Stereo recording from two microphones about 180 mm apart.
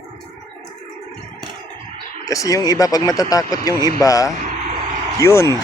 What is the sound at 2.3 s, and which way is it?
Speech, 20° left (ahead or behind).